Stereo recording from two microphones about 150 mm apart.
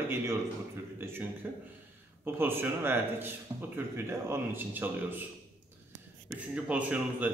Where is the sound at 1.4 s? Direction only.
10° right (ahead or behind).